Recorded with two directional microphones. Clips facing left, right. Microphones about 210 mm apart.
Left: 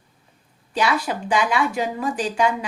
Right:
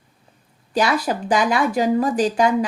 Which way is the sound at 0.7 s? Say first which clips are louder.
Right 3 dB; 40° right (ahead or behind).